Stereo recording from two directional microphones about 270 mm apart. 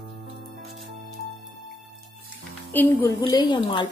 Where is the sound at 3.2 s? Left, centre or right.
Centre.